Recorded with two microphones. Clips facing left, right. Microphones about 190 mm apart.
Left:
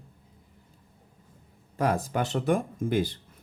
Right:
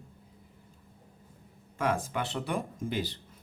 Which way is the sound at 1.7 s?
35° left (ahead or behind).